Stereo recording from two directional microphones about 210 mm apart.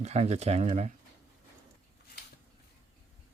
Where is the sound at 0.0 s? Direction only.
30° right (ahead or behind).